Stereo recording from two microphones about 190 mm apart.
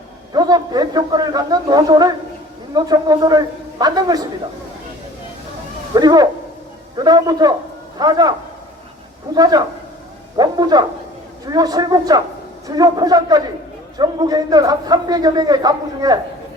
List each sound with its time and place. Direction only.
0.3 s a man's voice: 20° right (ahead or behind)
5.9 s a man's voice: 20° right (ahead or behind)